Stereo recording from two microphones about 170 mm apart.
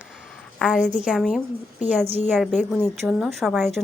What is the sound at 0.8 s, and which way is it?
Speech, 45° left (ahead or behind).